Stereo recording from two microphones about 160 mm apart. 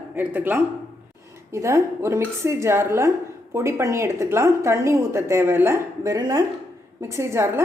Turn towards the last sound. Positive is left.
turn(degrees=-15)  # may be behind; listen again after turning